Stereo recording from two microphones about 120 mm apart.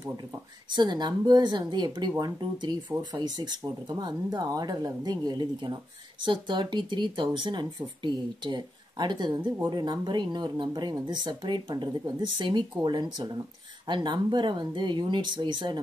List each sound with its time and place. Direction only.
0.7 s speech: 40° right (ahead or behind)